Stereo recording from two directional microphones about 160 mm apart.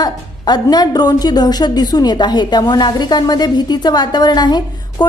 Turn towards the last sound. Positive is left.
turn(degrees=25)  # may be behind; listen again after turning